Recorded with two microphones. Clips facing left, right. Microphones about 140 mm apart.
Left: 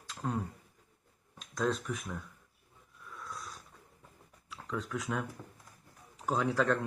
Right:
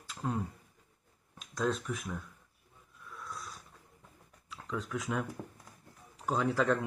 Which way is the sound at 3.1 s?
Centre (ahead or behind).